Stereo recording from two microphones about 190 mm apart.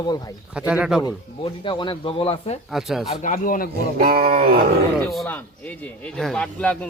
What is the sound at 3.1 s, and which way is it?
Speech, 40° left (ahead or behind).